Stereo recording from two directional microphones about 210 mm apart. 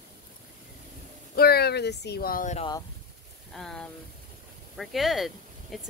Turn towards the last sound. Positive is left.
turn(degrees=0)  # may be behind; listen again after turning